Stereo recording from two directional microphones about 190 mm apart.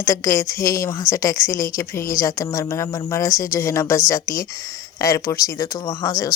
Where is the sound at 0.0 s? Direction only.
15° left (ahead or behind).